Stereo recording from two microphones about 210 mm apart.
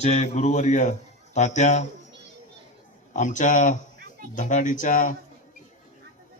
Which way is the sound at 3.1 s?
35° left (ahead or behind).